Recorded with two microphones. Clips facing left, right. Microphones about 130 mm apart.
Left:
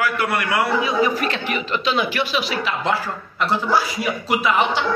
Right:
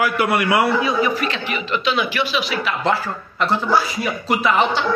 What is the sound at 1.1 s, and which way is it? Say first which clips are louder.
Speech: even; 45° left (ahead or behind).